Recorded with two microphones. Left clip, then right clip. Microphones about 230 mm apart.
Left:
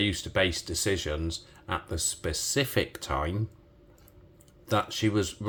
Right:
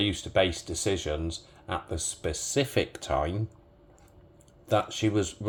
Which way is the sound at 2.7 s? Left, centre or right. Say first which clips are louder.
Right 2 dB; centre.